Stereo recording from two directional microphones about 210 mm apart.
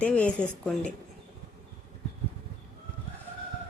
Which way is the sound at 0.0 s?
5° left (ahead or behind).